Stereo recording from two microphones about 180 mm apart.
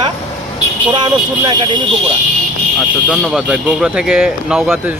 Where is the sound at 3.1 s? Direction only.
Centre (ahead or behind).